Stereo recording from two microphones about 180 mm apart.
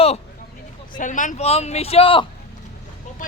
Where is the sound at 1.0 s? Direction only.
45° left (ahead or behind).